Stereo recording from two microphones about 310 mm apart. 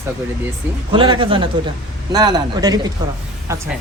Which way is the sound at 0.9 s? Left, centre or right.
Centre.